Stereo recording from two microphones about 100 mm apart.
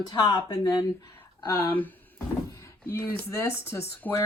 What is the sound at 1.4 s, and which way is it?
Speech, 20° left (ahead or behind).